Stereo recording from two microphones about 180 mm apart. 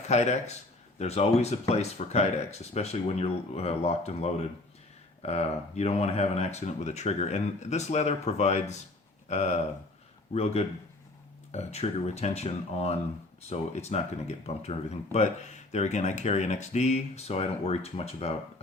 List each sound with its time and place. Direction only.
0.1 s speech: 40° left (ahead or behind)